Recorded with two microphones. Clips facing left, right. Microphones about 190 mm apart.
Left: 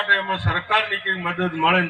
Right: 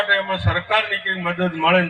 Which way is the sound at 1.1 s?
20° right (ahead or behind).